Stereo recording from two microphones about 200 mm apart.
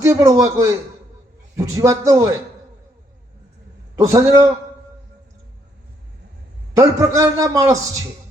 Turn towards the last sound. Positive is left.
turn(degrees=-15)  # may be behind; listen again after turning